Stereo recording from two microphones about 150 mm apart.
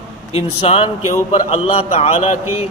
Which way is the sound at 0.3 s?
40° left (ahead or behind).